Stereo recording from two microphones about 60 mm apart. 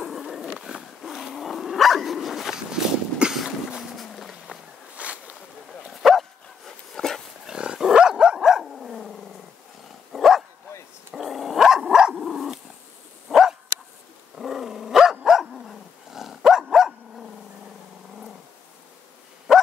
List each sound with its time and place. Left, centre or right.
0.0 s dog: centre
0.6 s wild animals: centre
1.1 s dog: centre
3.9 s walk: centre
4.9 s a sound: right
5.9 s dog: centre
7.4 s dog: centre
19.5 s dog: centre